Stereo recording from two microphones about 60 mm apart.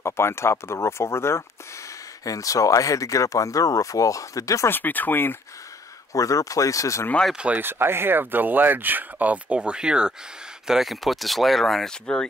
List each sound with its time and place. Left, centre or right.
0.0 s speech: left
2.2 s speech: left
4.6 s speech: left
6.1 s speech: left
7.3 s speech: right
7.6 s speech: right; by 10.1 s centre
10.7 s speech: centre